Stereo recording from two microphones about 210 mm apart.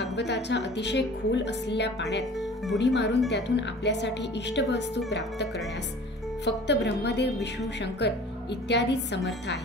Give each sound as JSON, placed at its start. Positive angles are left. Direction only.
{"t": 0.0, "sound": "speech", "side_deg": 55}